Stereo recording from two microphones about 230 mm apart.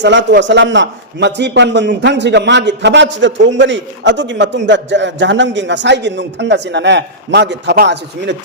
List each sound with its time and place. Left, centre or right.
0.0 s a man's voice: right